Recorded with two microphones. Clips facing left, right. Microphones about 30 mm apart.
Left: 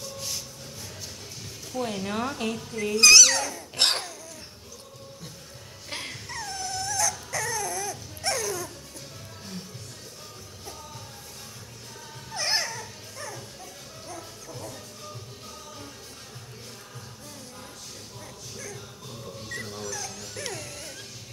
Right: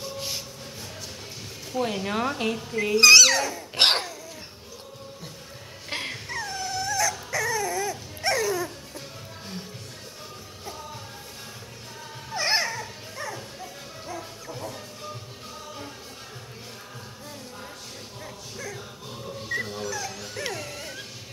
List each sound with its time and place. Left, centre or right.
0.0 s music: right
1.7 s speech: centre
3.7 s a sound: right
5.9 s dog: centre
12.3 s dog: centre
18.2 s music: centre
19.2 s dog: centre